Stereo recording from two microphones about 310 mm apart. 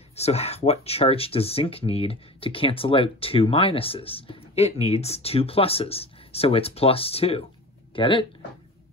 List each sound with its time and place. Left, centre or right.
0.1 s speech: centre